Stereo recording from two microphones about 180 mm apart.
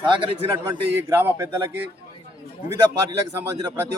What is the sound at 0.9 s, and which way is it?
Speech, 10° right (ahead or behind).